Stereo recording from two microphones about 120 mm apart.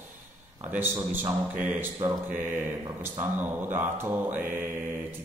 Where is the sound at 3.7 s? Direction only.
15° right (ahead or behind).